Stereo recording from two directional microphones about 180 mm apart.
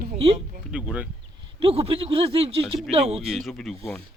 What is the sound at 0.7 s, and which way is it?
Speech, 5° right (ahead or behind).